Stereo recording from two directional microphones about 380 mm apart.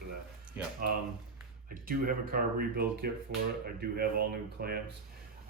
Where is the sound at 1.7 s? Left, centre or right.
Right.